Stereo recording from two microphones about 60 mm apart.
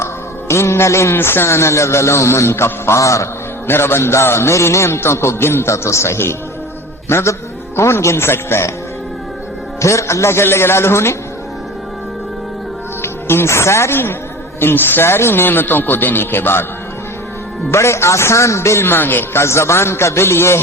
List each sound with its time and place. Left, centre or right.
0.0 s a man's voice: left
3.7 s a man's voice: left
9.8 s a man's voice: left
13.0 s speech: left
17.7 s a man's voice: left